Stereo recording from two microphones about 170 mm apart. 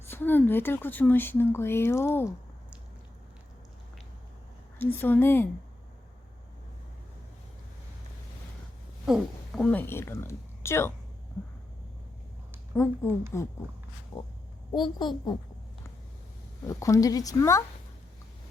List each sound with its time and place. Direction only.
0.1 s speech: 10° left (ahead or behind)
4.8 s speech: 10° left (ahead or behind)
9.0 s a woman's voice: centre (ahead or behind); by 10.9 s 15° left (ahead or behind)
12.7 s speech: 15° left (ahead or behind)
14.8 s speech: 25° left (ahead or behind)
16.6 s speech: 20° left (ahead or behind)